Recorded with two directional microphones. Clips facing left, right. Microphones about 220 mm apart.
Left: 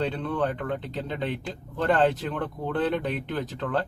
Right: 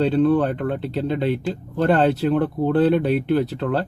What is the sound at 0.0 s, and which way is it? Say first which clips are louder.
Speech: right 10 dB; 35° right (ahead or behind).